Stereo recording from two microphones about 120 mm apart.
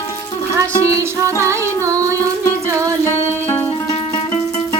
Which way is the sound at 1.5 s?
25° right (ahead or behind).